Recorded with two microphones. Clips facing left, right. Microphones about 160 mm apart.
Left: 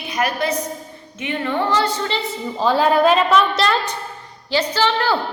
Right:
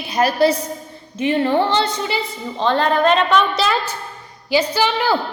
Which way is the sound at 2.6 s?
5° left (ahead or behind).